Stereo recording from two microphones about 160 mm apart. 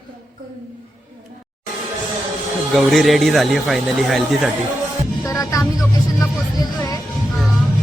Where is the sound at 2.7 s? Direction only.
Centre (ahead or behind).